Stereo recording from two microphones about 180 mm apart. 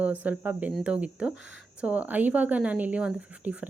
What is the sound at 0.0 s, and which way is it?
Speech, 10° right (ahead or behind).